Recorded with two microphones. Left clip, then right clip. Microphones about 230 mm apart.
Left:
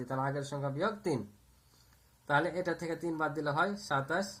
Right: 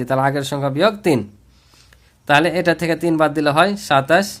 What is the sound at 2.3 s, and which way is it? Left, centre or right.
Speech, right.